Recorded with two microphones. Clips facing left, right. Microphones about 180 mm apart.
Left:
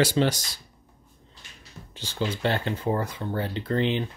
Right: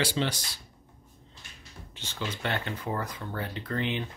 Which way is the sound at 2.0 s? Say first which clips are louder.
Left 7 dB; 35° left (ahead or behind).